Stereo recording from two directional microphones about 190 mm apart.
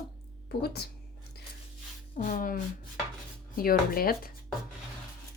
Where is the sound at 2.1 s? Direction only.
45° left (ahead or behind).